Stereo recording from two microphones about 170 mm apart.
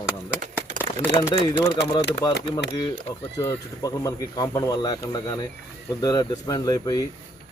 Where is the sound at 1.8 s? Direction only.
90° left.